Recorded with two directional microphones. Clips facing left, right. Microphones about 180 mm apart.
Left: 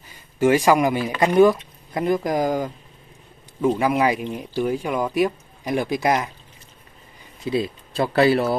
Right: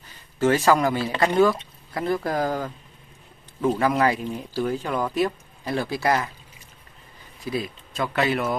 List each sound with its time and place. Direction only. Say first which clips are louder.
0.4 s speech: left 3 dB; 15° left (ahead or behind)
7.3 s speech: left 5 dB; 25° left (ahead or behind)